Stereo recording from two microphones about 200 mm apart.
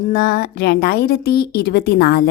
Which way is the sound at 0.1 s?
50° left (ahead or behind).